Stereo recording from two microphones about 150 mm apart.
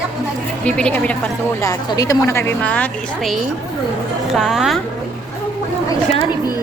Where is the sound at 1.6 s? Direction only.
25° left (ahead or behind).